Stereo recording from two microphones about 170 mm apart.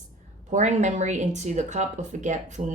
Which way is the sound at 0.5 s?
45° right (ahead or behind).